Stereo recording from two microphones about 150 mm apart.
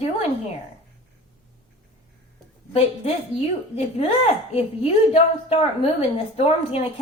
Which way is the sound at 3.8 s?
45° left (ahead or behind).